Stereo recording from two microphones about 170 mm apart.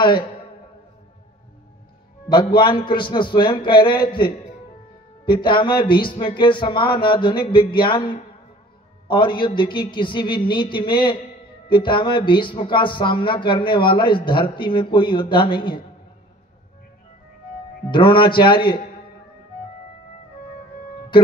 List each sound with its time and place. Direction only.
0.0 s speech: 30° left (ahead or behind)
2.2 s speech: 25° left (ahead or behind)
5.2 s speech: 25° left (ahead or behind)
17.9 s speech: 30° left (ahead or behind)